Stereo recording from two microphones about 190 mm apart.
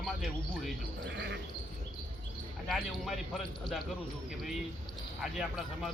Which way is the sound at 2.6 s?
Centre (ahead or behind).